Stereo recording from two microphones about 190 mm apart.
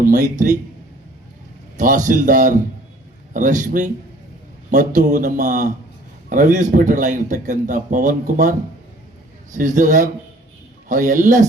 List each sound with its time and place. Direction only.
0.0 s speech: 45° right (ahead or behind)
1.8 s speech: 45° right (ahead or behind)